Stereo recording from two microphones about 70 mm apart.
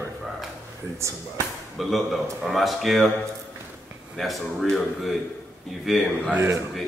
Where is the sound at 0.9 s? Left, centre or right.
Right.